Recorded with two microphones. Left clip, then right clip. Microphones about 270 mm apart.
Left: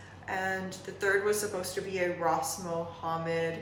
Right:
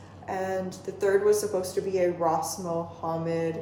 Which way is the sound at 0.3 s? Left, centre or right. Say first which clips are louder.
Right 3 dB; centre.